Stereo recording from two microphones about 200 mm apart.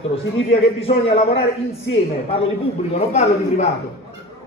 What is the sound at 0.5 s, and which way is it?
Speech, 30° left (ahead or behind).